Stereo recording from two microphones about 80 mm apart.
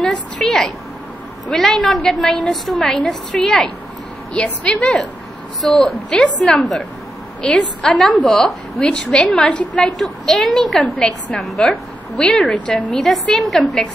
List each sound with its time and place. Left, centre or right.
0.0 s a woman's voice: centre
9.9 s a woman's voice: centre